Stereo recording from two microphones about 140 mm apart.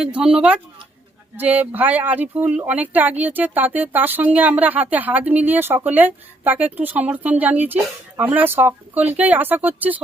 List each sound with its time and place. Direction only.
0.0 s speech: 10° right (ahead or behind)